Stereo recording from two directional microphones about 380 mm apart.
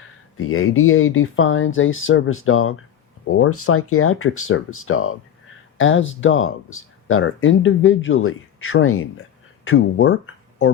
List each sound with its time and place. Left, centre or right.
0.3 s speech: left